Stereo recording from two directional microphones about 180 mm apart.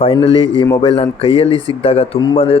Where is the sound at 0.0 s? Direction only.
30° left (ahead or behind).